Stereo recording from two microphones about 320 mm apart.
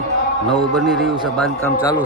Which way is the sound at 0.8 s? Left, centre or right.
Centre.